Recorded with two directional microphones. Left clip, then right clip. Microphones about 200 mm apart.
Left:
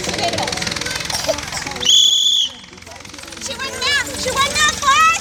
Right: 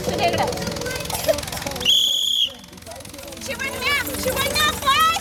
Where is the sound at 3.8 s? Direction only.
40° right (ahead or behind).